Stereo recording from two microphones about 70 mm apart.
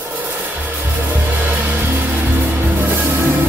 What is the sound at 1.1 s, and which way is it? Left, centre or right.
Music, right.